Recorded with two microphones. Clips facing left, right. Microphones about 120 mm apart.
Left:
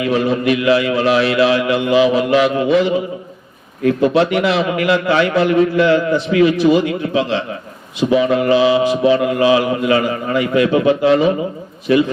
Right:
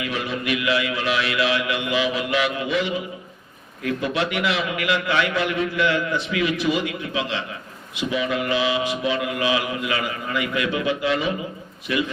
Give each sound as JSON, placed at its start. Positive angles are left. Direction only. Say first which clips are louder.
{"t": 0.0, "sound": "a man's voice", "louder": "left 11 dB", "side_deg": 35}